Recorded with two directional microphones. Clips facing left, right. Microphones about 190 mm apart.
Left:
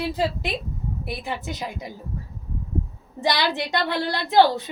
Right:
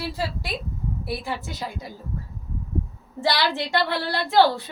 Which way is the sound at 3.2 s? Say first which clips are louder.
Even; 15° left (ahead or behind).